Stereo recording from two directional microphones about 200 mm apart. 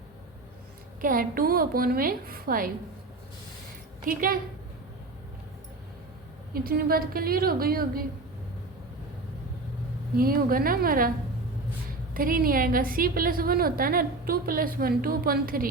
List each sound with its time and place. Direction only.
1.0 s a woman's voice: 45° right (ahead or behind)
4.0 s a woman's voice: 45° right (ahead or behind)
6.5 s a woman's voice: 45° right (ahead or behind)
10.2 s a woman's voice: 45° right (ahead or behind)
12.1 s a woman's voice: 45° right (ahead or behind)